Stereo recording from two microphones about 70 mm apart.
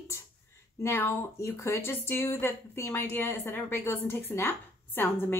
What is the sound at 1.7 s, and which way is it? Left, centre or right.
A woman's voice, left.